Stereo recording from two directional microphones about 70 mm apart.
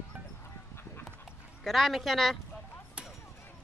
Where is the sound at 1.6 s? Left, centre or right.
Centre.